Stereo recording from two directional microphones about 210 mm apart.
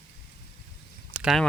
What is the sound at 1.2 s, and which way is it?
Speech, centre (ahead or behind).